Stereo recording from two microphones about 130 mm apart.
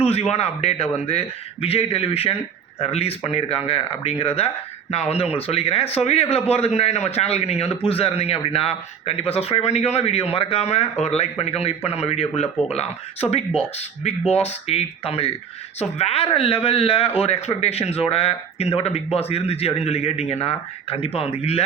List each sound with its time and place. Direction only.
0.0 s speech: 55° left (ahead or behind)